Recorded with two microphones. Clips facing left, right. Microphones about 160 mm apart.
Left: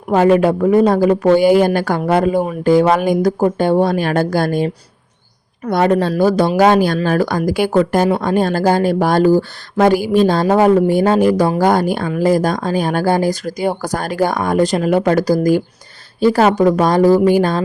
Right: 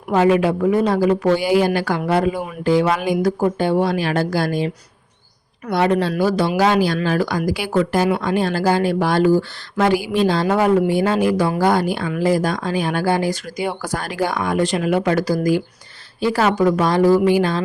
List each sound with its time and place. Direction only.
0.1 s speech: 45° left (ahead or behind)